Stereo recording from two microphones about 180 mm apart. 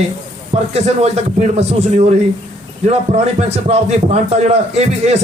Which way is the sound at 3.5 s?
35° right (ahead or behind).